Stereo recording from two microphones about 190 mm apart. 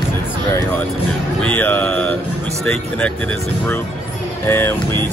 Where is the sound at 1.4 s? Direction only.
10° left (ahead or behind).